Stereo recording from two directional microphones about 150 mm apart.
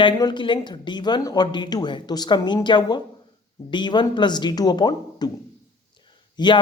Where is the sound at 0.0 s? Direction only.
30° left (ahead or behind).